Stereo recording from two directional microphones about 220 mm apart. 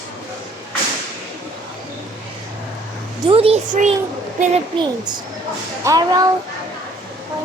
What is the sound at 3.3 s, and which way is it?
A woman's voice, 25° right (ahead or behind).